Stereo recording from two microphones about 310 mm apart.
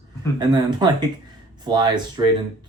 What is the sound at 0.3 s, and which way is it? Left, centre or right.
Speech, centre.